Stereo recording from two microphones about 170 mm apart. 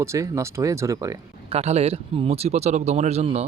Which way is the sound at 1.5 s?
40° right (ahead or behind).